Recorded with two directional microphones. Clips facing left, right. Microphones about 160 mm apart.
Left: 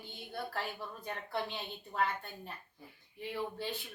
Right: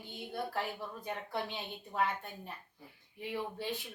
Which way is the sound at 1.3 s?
15° right (ahead or behind).